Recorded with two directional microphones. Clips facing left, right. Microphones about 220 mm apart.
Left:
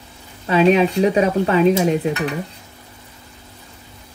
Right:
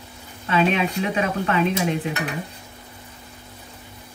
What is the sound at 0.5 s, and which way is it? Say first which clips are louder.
Speech: left 7 dB; 35° left (ahead or behind).